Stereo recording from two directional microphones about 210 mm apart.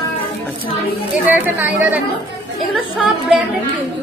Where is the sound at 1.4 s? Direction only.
5° right (ahead or behind).